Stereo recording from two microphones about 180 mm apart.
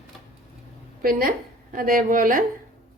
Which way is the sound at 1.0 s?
50° right (ahead or behind).